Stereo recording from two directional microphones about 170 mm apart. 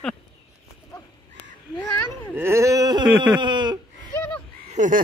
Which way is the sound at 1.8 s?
15° left (ahead or behind).